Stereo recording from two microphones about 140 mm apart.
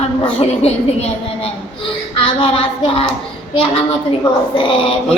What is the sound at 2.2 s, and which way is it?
Speech, 40° left (ahead or behind).